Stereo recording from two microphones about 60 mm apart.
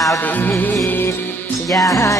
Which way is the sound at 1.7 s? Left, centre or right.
Left.